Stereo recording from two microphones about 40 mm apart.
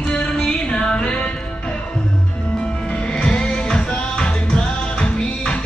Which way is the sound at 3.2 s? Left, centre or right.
Left.